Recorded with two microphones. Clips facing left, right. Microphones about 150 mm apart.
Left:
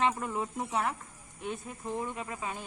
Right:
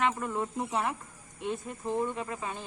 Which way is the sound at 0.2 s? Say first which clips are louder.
Right 2 dB; 10° left (ahead or behind).